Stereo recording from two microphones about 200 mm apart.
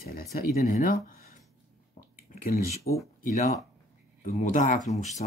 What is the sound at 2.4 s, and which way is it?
Speech, 50° left (ahead or behind).